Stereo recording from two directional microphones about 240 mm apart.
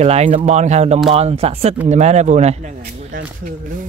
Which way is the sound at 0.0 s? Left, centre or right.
Right.